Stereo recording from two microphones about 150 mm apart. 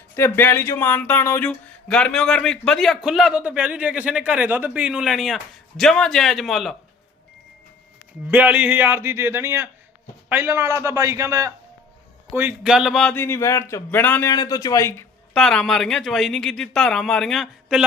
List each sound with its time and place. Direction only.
0.2 s speech: 15° left (ahead or behind)
8.3 s a man's voice: 10° right (ahead or behind)
12.4 s speech: 10° right (ahead or behind)
13.1 s a man's voice: 15° left (ahead or behind)
14.3 s speech: 25° left (ahead or behind)
15.3 s speech: 5° left (ahead or behind)